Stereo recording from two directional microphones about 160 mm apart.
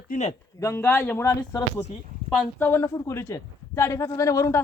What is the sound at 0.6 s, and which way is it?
A man's voice, 15° left (ahead or behind).